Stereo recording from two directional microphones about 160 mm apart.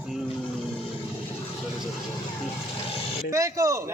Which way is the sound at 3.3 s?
20° right (ahead or behind).